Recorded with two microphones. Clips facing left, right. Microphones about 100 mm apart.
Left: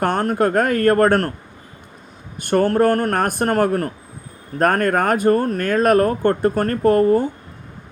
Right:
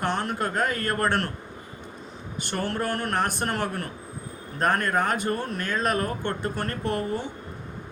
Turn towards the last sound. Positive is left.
turn(degrees=45)  # may be behind; listen again after turning